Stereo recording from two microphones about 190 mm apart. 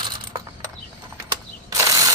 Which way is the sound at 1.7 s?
20° right (ahead or behind).